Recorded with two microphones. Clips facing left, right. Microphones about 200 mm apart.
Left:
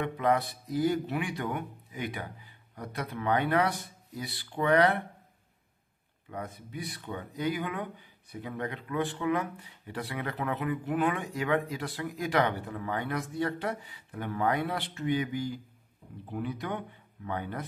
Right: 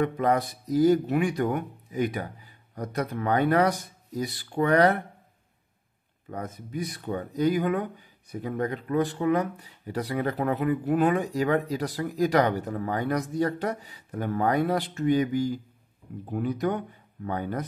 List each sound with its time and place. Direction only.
0.0 s speech: 40° right (ahead or behind)
6.3 s speech: 45° right (ahead or behind)